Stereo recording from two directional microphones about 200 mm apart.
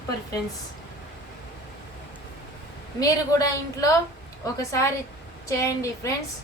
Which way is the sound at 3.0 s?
15° left (ahead or behind).